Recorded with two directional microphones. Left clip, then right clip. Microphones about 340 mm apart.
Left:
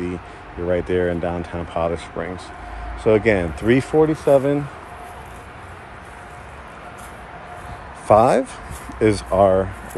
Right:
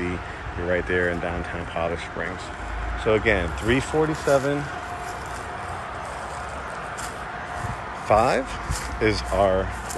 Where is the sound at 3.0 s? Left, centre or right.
Centre.